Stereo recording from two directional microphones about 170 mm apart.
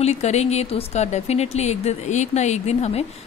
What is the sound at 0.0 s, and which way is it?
A woman's voice, 40° left (ahead or behind).